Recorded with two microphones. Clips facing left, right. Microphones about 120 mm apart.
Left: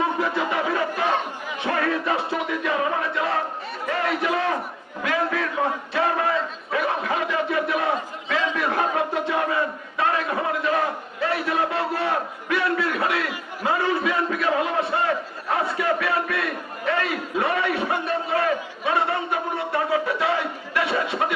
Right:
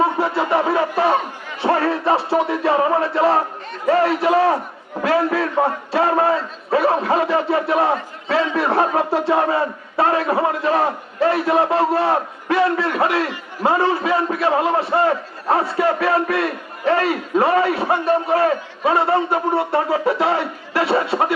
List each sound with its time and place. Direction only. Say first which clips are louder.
0.0 s a man's voice: right 5 dB; 35° right (ahead or behind)